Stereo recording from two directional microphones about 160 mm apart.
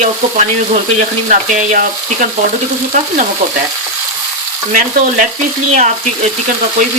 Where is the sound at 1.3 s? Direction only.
55° right (ahead or behind).